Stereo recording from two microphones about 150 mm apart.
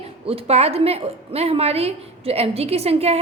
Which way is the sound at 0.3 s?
40° right (ahead or behind).